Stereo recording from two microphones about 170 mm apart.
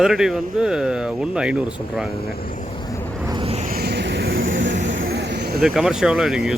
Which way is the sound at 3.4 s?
35° right (ahead or behind).